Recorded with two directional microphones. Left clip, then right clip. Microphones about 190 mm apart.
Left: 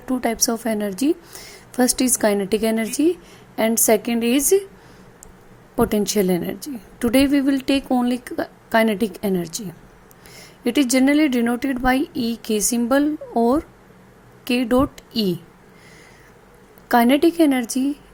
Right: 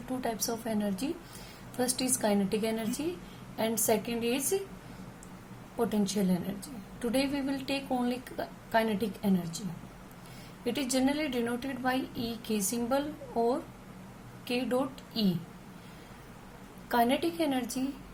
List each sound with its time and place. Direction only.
0.2 s a woman's voice: 50° left (ahead or behind)
5.7 s a woman's voice: 50° left (ahead or behind)
10.6 s a woman's voice: 50° left (ahead or behind)
16.9 s a woman's voice: 50° left (ahead or behind)